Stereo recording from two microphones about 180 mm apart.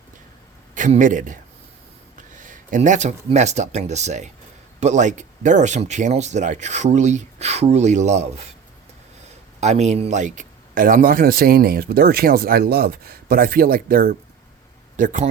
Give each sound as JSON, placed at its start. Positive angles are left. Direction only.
{"t": 0.7, "sound": "a man's voice", "side_deg": -45}
{"t": 9.6, "sound": "speech", "side_deg": -40}